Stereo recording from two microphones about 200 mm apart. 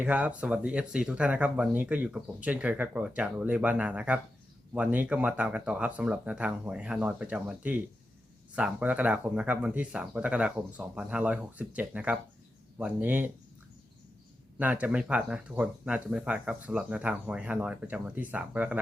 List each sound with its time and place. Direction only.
0.0 s speech: 5° right (ahead or behind)
14.6 s speech: 10° right (ahead or behind)